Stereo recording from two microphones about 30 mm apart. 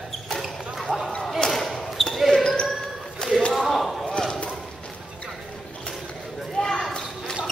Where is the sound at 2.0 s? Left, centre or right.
Centre.